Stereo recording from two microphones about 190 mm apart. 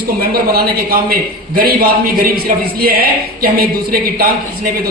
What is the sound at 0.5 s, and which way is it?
Speech, 50° right (ahead or behind).